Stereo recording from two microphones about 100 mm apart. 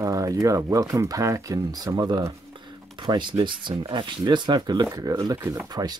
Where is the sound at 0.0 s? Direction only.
35° right (ahead or behind).